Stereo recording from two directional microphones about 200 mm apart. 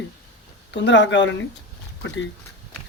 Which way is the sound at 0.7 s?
60° left (ahead or behind).